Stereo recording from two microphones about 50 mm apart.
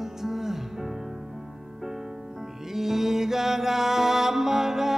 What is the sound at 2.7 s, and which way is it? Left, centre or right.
Music, centre.